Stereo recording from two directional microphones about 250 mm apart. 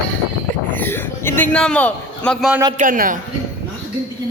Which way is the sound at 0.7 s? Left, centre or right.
Centre.